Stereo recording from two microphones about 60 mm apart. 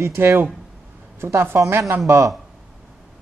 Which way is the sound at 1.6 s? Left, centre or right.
Right.